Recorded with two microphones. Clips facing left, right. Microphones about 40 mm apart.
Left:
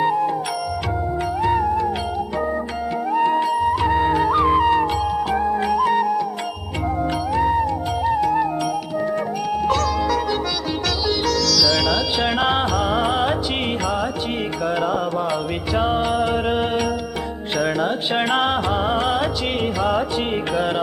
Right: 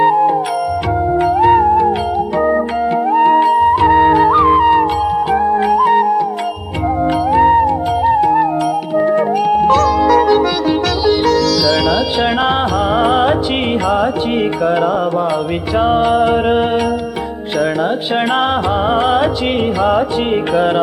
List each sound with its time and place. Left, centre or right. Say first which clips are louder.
0.0 s music: right 8 dB; right
1.4 s music: right 9 dB; right
3.1 s music: right 8 dB; right
7.3 s music: right 9 dB; right
8.0 s music: right 7 dB; right
9.0 s music: right 12 dB; right
14.6 s music: right 5 dB; right
18.3 s music: right 4 dB; centre
18.9 s music: right 7 dB; right